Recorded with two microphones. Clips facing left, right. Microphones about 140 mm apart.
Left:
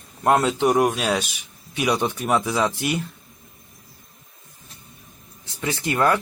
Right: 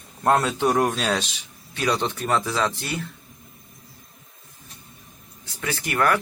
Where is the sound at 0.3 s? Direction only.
15° left (ahead or behind).